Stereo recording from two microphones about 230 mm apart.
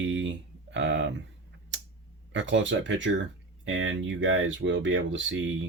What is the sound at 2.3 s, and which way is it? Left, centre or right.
Speech, right.